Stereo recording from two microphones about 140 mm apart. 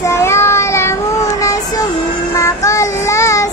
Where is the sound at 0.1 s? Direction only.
20° left (ahead or behind).